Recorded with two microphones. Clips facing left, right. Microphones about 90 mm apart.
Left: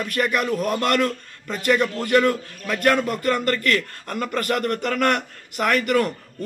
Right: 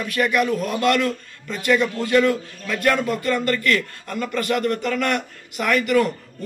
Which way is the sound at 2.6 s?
45° left (ahead or behind).